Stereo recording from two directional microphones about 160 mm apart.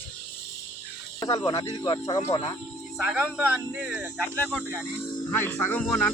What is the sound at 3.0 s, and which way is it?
Speech, 10° right (ahead or behind).